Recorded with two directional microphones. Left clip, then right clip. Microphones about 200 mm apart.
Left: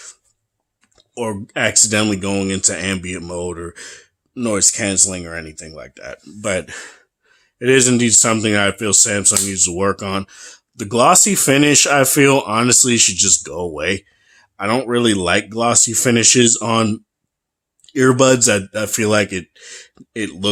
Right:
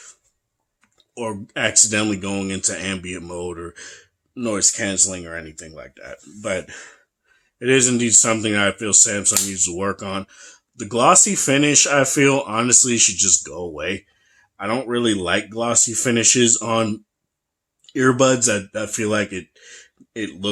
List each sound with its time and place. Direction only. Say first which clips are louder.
0.9 s speech: left 4 dB; 35° left (ahead or behind)